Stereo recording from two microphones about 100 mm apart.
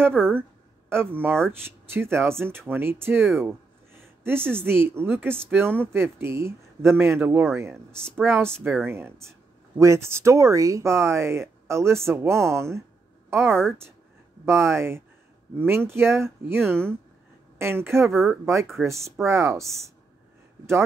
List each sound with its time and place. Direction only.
0.1 s a woman's voice: 10° left (ahead or behind)
0.4 s speech: 20° right (ahead or behind)
4.4 s a woman's voice: 10° left (ahead or behind)
4.6 s speech: 25° right (ahead or behind)
18.1 s speech: centre (ahead or behind)
18.4 s speech: 30° right (ahead or behind)